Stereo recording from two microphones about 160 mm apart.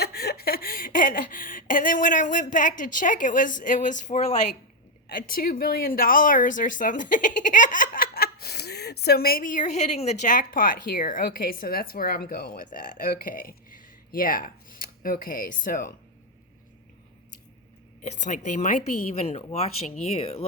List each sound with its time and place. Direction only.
0.0 s speech: 80° left; by 4.4 s 50° left (ahead or behind)
5.0 s a woman's voice: 65° left (ahead or behind)
18.0 s a woman's voice: 50° left (ahead or behind)
19.4 s speech: 40° left (ahead or behind)